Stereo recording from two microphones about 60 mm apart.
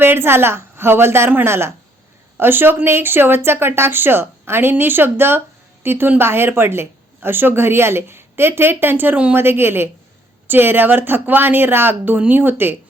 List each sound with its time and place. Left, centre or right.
0.0 s a woman's voice: right